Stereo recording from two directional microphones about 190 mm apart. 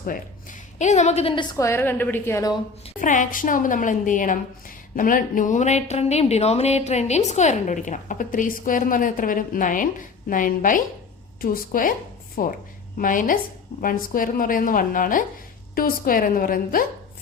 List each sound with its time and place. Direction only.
0.8 s a woman's voice: 40° left (ahead or behind)
1.5 s a woman's voice: 15° left (ahead or behind)
3.0 s speech: 45° left (ahead or behind)